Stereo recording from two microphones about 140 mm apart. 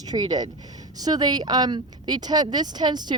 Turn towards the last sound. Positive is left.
turn(degrees=-30)  # may be behind; listen again after turning